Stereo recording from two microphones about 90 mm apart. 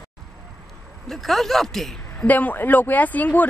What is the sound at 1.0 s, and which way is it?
Speech, centre (ahead or behind).